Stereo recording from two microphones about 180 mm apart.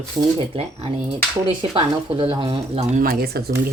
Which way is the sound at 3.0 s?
55° right (ahead or behind).